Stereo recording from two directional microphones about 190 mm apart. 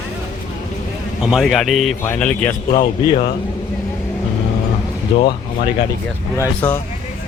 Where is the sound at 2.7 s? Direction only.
20° left (ahead or behind).